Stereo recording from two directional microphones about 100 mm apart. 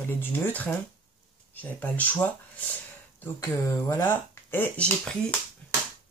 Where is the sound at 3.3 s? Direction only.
25° left (ahead or behind).